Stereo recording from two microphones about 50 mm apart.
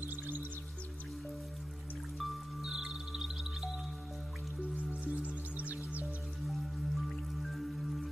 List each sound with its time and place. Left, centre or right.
0.0 s music: right
2.1 s music: centre
5.0 s music: right
6.4 s music: centre